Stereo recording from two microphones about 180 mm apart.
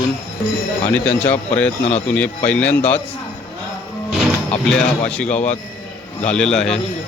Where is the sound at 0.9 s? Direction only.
10° left (ahead or behind).